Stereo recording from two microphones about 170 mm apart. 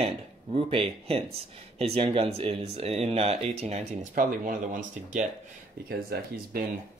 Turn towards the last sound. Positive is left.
turn(degrees=-65)  # may be behind; listen again after turning